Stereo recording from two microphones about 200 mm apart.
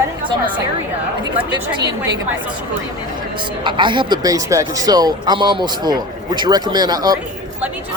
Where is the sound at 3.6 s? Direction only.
25° right (ahead or behind).